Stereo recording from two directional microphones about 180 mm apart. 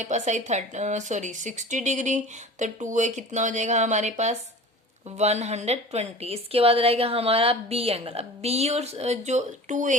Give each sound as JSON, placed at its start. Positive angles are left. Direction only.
{"t": 0.0, "sound": "a woman's voice", "side_deg": -40}